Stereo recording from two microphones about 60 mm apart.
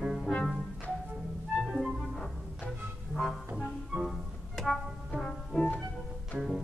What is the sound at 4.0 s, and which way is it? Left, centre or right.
Music, centre.